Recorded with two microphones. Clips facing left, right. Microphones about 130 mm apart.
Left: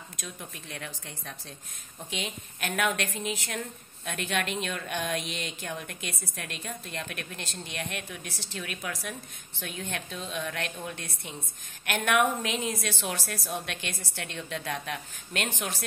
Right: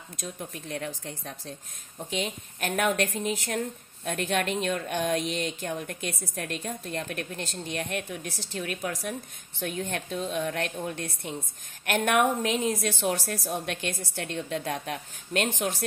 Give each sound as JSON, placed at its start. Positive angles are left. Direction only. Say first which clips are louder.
{"t": 0.2, "sound": "speech", "louder": "right 6 dB", "side_deg": -40}